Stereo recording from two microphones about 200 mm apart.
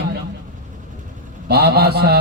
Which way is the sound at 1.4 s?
50° right (ahead or behind).